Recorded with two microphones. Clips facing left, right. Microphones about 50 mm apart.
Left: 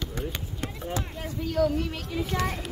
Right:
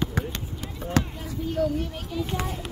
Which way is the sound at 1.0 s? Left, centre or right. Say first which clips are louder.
Right 11 dB; right.